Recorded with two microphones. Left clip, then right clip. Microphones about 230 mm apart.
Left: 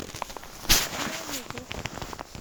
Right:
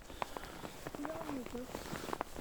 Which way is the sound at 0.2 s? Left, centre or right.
Left.